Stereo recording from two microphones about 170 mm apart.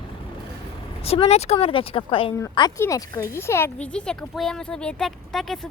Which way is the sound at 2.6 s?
20° left (ahead or behind).